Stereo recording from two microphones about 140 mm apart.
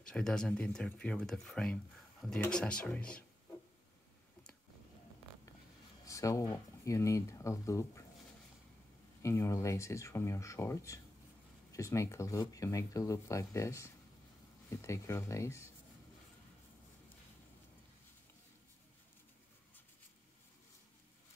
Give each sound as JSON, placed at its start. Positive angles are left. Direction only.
{"t": 0.0, "sound": "speech", "side_deg": 5}
{"t": 6.0, "sound": "speech", "side_deg": 25}
{"t": 9.2, "sound": "speech", "side_deg": 20}